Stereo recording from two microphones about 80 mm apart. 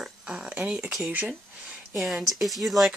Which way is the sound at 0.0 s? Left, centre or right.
Centre.